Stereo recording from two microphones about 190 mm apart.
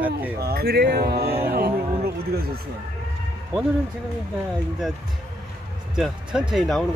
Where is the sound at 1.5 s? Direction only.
55° right (ahead or behind).